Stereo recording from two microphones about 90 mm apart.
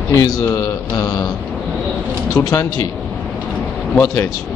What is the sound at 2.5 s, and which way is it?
Speech, 35° left (ahead or behind).